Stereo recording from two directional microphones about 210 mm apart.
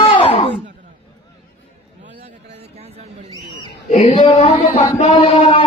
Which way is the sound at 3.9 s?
30° left (ahead or behind).